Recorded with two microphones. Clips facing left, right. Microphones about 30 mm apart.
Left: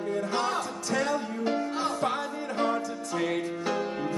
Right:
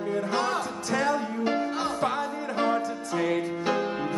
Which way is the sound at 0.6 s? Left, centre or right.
Right.